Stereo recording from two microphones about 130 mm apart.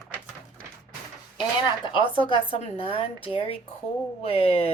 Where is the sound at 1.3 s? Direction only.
40° left (ahead or behind).